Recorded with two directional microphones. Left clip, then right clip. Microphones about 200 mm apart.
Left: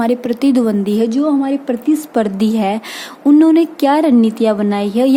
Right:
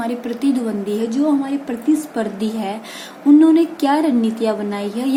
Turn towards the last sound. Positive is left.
turn(degrees=55)  # may be behind; listen again after turning